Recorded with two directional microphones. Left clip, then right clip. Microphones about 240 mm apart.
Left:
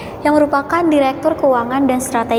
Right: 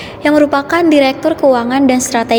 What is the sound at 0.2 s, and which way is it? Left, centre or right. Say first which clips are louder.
A woman's voice: right 3 dB; right.